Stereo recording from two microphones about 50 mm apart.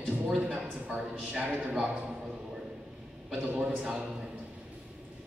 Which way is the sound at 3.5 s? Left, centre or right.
Right.